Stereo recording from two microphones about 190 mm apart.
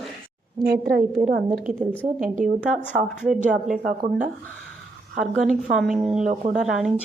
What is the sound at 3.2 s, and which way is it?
Speech, 5° right (ahead or behind).